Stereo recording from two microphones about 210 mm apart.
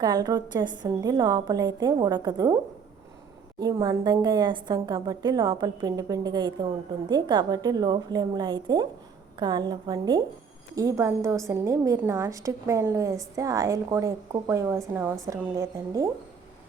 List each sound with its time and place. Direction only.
0.0 s a woman's voice: 20° right (ahead or behind)
3.6 s a woman's voice: 20° right (ahead or behind)